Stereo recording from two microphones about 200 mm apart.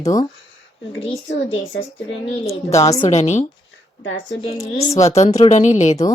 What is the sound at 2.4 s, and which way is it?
Speech, 15° left (ahead or behind).